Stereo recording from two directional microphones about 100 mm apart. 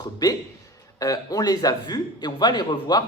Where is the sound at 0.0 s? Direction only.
40° left (ahead or behind).